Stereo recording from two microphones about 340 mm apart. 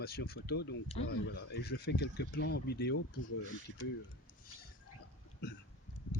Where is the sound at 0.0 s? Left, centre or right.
Left.